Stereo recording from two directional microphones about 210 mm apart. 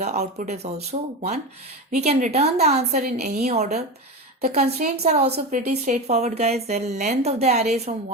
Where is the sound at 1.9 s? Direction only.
35° right (ahead or behind).